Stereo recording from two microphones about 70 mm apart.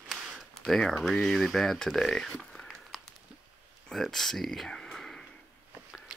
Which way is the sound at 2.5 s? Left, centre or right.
Centre.